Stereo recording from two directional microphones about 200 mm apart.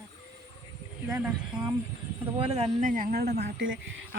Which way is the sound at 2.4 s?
30° right (ahead or behind).